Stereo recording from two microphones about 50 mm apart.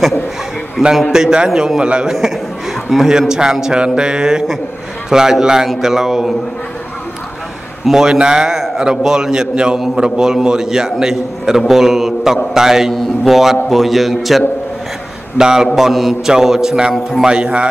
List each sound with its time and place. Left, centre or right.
0.8 s a man's voice: centre
7.8 s a man's voice: centre